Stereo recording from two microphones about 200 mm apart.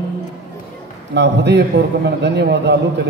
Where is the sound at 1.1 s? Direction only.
60° right (ahead or behind).